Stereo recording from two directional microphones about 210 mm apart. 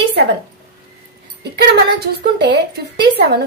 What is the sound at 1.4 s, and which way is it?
A woman's voice, 50° right (ahead or behind).